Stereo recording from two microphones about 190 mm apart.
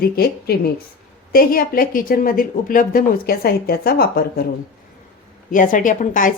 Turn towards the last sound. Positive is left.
turn(degrees=45)  # may be behind; listen again after turning